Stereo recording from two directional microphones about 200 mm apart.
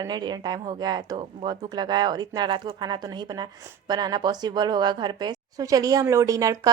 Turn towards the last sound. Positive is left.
turn(degrees=-15)  # may be behind; listen again after turning